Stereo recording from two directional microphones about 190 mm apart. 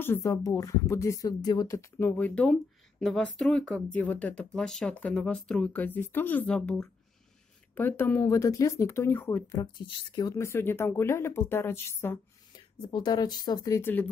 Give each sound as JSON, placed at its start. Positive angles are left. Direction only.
{"t": 0.0, "sound": "speech", "side_deg": 15}